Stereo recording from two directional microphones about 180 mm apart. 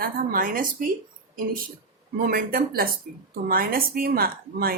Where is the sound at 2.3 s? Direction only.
55° right (ahead or behind).